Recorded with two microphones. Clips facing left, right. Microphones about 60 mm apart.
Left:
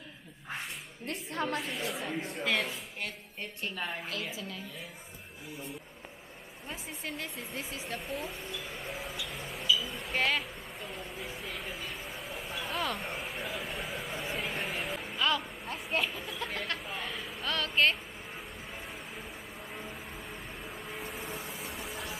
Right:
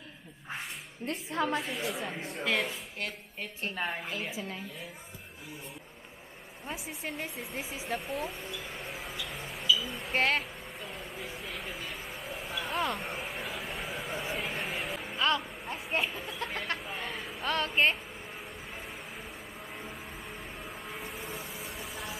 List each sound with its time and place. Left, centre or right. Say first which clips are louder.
1.3 s speech: right 3 dB; centre
1.6 s a woman's voice: right 1 dB; centre
3.7 s a woman's voice: right 3 dB; centre
6.7 s speech: right 2 dB; centre
8.0 s speech: right 2 dB; centre
9.2 s a sound: even; centre
9.8 s vehicle: right 1 dB; centre
10.8 s a sound: even; centre
15.1 s vehicle: right 1 dB; right
15.6 s a sound: even; centre
16.7 s speech: right 1 dB; centre
17.4 s a woman's voice: right 1 dB; right
19.7 s vehicle: left 1 dB; centre